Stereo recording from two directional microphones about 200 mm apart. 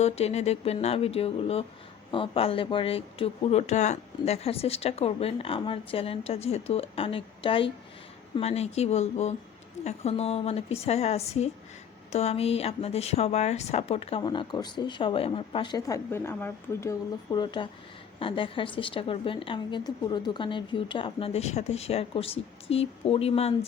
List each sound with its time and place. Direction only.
0.0 s a woman's voice: 30° left (ahead or behind); by 16.9 s 10° left (ahead or behind)
17.3 s speech: 20° left (ahead or behind)